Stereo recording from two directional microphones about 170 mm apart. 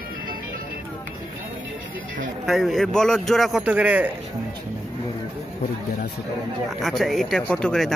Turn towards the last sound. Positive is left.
turn(degrees=5)  # may be behind; listen again after turning